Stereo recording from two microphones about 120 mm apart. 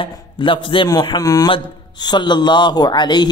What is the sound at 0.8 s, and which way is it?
A man's voice, 35° left (ahead or behind).